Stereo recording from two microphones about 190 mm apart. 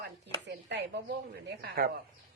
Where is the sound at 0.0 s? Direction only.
60° right (ahead or behind).